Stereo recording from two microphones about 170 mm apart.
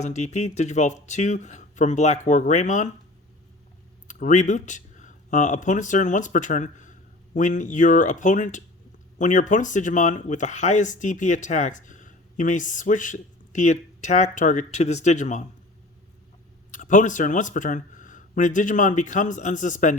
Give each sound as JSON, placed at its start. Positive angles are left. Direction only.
{"t": 0.0, "sound": "speech", "side_deg": 40}
{"t": 4.1, "sound": "speech", "side_deg": 45}
{"t": 16.7, "sound": "speech", "side_deg": 50}